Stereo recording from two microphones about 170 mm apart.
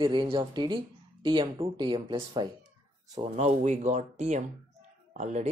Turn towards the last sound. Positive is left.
turn(degrees=-45)  # may be behind; listen again after turning